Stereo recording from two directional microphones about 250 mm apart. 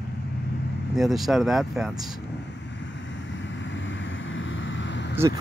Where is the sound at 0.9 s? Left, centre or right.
Centre.